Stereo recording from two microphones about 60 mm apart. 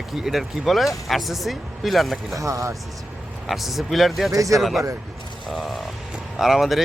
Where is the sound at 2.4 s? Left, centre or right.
Right.